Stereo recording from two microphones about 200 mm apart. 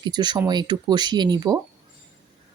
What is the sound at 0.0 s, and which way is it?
Speech, 20° right (ahead or behind).